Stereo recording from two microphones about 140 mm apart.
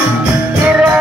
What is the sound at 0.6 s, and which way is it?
Music, 10° right (ahead or behind).